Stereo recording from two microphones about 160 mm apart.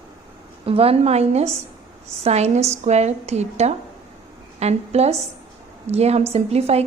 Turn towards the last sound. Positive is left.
turn(degrees=-40)  # may be behind; listen again after turning